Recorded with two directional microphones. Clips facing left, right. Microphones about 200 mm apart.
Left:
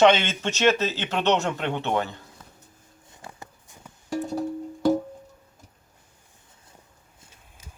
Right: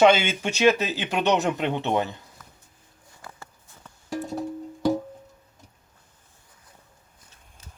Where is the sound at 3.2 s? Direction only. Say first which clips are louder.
Left 2 dB; 15° left (ahead or behind).